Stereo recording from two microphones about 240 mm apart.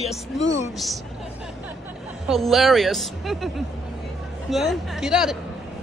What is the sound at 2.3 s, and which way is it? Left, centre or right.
A woman's voice, centre.